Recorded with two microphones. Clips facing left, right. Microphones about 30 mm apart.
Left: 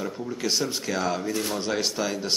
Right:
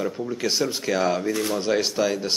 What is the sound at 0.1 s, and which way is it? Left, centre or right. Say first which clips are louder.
Speech: right 2 dB; centre.